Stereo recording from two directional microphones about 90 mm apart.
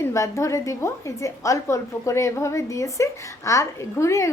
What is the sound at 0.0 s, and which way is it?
A woman's voice, 35° left (ahead or behind).